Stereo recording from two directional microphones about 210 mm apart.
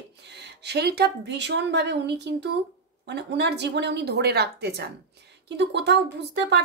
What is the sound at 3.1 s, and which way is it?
Speech, 55° right (ahead or behind).